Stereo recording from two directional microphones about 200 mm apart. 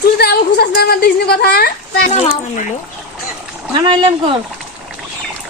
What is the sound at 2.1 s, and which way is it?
Speech, 35° left (ahead or behind).